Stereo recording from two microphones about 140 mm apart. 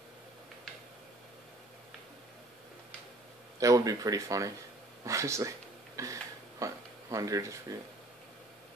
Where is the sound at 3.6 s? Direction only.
25° right (ahead or behind).